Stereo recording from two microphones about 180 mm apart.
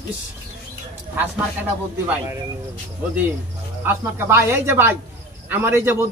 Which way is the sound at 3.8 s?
10° right (ahead or behind).